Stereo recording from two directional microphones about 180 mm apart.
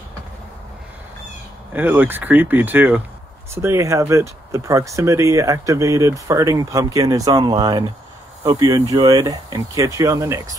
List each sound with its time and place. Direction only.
1.7 s speech: 10° right (ahead or behind)